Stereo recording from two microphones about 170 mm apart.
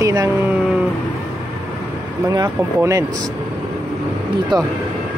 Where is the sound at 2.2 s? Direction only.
20° right (ahead or behind).